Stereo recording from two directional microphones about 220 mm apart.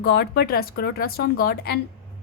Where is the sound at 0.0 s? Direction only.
45° left (ahead or behind).